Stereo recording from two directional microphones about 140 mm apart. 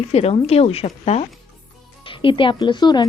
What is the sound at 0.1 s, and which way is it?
A woman's voice, 45° left (ahead or behind).